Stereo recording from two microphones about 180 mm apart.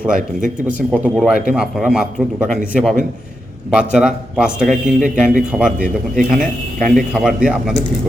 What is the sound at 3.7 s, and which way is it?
A man's voice, 5° right (ahead or behind).